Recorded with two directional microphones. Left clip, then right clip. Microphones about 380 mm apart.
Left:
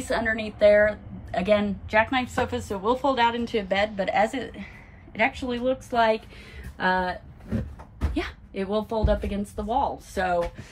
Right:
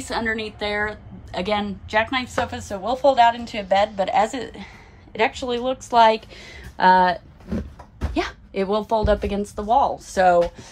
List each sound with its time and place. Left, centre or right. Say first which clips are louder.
0.0 s a woman's voice: right 1 dB; centre
8.1 s a woman's voice: right 6 dB; centre